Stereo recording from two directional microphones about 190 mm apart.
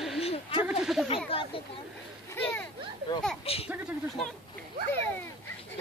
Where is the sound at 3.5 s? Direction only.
30° left (ahead or behind).